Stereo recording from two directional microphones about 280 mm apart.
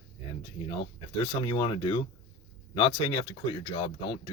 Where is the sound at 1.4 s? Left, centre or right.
Centre.